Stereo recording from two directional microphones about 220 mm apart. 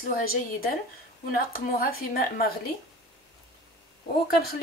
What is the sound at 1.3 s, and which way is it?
Speech, 40° left (ahead or behind).